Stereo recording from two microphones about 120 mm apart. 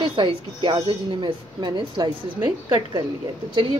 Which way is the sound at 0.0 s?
45° right (ahead or behind).